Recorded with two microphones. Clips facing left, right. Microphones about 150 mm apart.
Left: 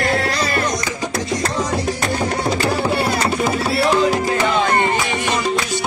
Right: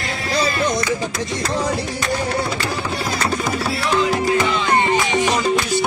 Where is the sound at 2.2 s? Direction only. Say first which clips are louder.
Left 2 dB; 35° left (ahead or behind).